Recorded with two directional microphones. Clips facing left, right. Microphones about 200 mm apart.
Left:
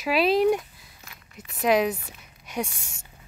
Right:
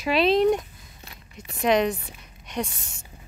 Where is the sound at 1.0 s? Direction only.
30° right (ahead or behind).